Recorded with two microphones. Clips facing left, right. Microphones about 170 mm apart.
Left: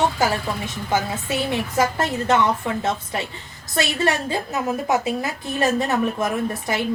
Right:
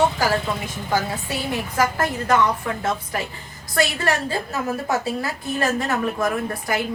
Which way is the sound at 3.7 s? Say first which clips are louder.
Even; 20° left (ahead or behind).